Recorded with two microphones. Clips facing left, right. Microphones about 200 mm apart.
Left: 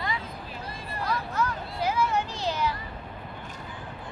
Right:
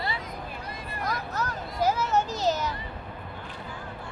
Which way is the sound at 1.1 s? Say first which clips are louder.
Left 3 dB; 40° right (ahead or behind).